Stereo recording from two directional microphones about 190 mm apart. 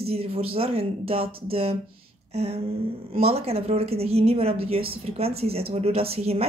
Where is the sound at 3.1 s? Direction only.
35° right (ahead or behind).